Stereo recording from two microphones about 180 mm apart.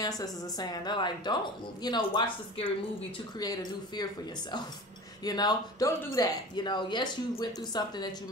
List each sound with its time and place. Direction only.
0.0 s speech: 20° left (ahead or behind)
5.2 s speech: 20° left (ahead or behind)